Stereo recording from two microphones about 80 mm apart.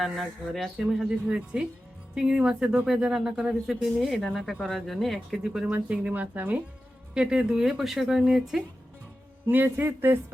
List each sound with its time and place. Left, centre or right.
0.0 s speech: centre
9.5 s a man's voice: right